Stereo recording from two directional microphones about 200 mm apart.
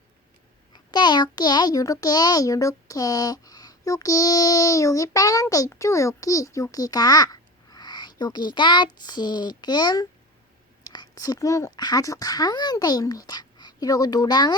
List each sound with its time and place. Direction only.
0.9 s a child's voice: 20° left (ahead or behind)